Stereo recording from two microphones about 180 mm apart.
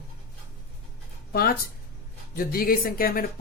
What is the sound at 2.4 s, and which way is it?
Speech, 55° left (ahead or behind).